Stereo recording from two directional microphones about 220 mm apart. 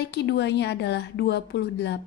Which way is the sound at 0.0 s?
50° left (ahead or behind).